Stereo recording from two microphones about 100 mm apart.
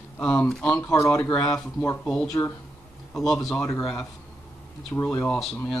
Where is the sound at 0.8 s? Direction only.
30° left (ahead or behind).